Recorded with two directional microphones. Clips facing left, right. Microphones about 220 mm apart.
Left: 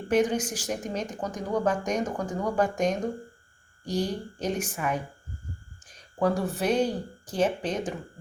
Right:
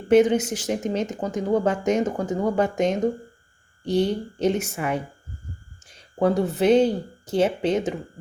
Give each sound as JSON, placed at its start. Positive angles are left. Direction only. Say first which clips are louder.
{"t": 0.1, "sound": "a woman's voice", "louder": "right 7 dB", "side_deg": -25}